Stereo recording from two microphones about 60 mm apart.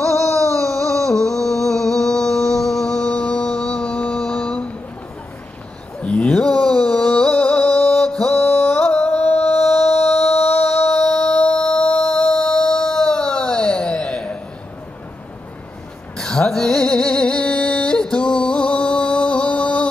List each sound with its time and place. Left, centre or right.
0.0 s a sound: centre
6.0 s a sound: left
8.3 s mantra: left
10.0 s music: centre
10.3 s music: left
10.9 s music: centre
16.2 s music: centre